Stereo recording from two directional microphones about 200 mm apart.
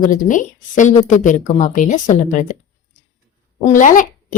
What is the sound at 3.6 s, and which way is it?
Speech, 40° left (ahead or behind).